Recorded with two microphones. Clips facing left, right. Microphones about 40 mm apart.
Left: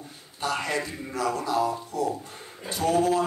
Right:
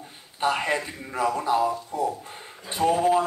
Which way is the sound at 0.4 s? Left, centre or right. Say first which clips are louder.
Right 4 dB; right.